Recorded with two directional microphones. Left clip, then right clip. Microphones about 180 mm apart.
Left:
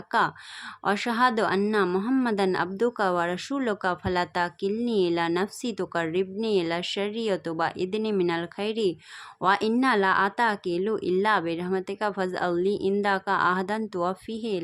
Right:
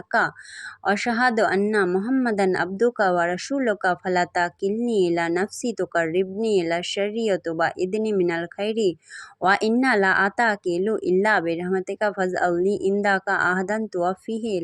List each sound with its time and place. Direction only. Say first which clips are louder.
0.9 s speech: right 2 dB; 10° right (ahead or behind)